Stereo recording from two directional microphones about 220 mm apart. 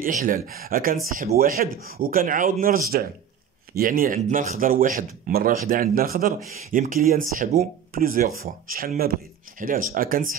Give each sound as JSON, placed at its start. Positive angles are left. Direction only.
{"t": 0.0, "sound": "speech", "side_deg": -35}
{"t": 1.7, "sound": "speech", "side_deg": -70}
{"t": 2.0, "sound": "speech", "side_deg": -40}